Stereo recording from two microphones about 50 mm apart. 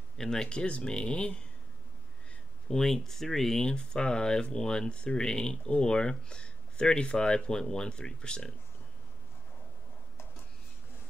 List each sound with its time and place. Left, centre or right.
0.2 s speech: centre
2.7 s speech: centre